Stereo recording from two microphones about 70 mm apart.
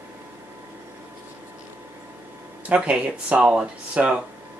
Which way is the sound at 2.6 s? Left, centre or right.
Centre.